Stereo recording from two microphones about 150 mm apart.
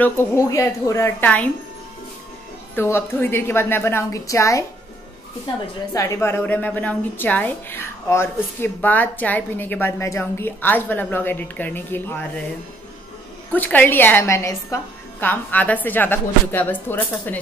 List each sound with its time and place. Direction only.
0.4 s a woman's voice: 20° left (ahead or behind)
2.7 s a woman's voice: 15° left (ahead or behind)
5.9 s a woman's voice: 20° left (ahead or behind)
13.5 s a woman's voice: 10° left (ahead or behind)